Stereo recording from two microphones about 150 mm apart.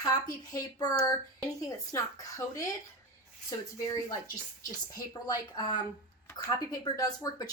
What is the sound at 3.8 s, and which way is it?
A woman's voice, 20° left (ahead or behind).